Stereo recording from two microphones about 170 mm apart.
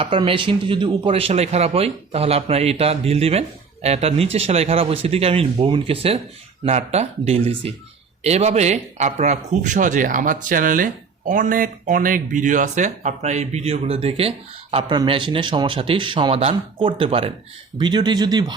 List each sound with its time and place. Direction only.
0.0 s speech: 30° right (ahead or behind)